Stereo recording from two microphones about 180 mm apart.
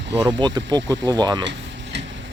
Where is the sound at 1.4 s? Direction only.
75° right (ahead or behind).